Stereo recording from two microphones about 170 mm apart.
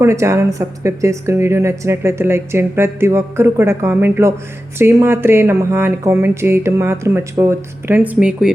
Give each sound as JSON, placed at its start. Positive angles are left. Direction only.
{"t": 0.0, "sound": "a woman's voice", "side_deg": -15}